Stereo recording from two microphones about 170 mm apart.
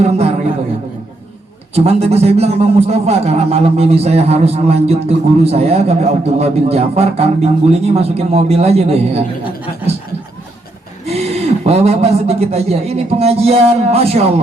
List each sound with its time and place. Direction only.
0.0 s a man's voice: 40° right (ahead or behind)
1.7 s a man's voice: 35° right (ahead or behind)
11.0 s a man's voice: 40° right (ahead or behind)